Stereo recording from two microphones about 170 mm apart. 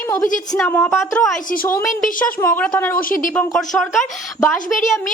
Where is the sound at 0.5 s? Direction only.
5° left (ahead or behind).